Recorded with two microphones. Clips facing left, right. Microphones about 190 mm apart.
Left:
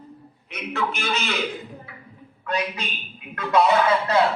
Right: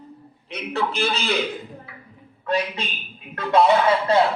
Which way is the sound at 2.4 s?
30° right (ahead or behind).